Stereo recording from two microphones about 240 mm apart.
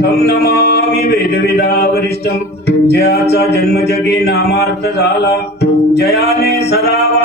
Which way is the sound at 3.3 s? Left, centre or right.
Left.